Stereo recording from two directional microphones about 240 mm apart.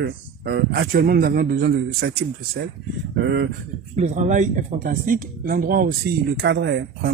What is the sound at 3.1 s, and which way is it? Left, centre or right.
Speech, right.